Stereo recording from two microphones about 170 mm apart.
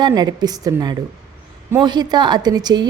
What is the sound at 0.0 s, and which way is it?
A woman's voice, 25° right (ahead or behind).